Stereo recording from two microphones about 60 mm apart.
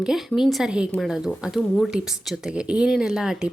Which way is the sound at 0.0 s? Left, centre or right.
Centre.